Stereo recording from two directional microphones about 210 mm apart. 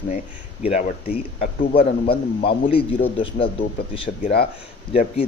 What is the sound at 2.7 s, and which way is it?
A man's voice, 25° left (ahead or behind).